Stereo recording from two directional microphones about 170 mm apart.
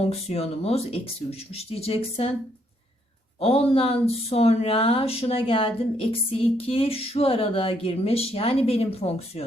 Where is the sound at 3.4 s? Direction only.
35° left (ahead or behind).